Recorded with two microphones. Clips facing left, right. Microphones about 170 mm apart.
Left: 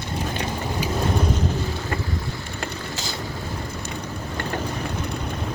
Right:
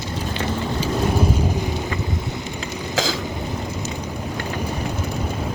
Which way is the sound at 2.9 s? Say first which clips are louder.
Right 9 dB; 90° right.